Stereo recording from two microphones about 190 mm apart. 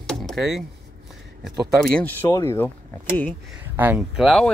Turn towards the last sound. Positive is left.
turn(degrees=0)  # may be behind; listen again after turning